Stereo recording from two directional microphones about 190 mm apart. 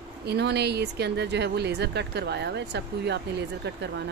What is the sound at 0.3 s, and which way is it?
Speech, 60° right (ahead or behind).